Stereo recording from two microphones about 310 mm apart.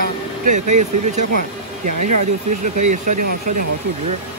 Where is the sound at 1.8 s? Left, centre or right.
Right.